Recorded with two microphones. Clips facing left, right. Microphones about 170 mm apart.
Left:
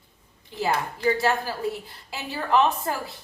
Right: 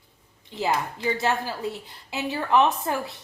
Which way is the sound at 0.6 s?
20° right (ahead or behind).